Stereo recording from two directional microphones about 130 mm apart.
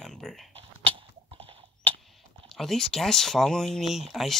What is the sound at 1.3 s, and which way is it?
Horse, 45° right (ahead or behind).